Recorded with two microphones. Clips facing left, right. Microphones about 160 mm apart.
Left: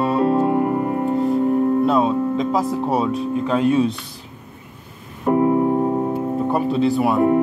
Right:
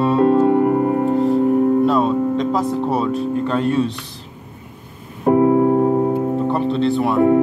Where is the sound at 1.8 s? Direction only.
Centre (ahead or behind).